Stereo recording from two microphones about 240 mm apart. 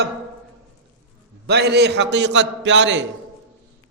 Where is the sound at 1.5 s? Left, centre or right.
Right.